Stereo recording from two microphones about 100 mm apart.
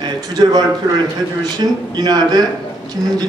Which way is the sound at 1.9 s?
40° right (ahead or behind).